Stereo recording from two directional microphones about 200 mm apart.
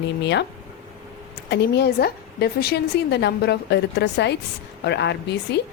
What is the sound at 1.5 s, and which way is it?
A woman's voice, 55° left (ahead or behind).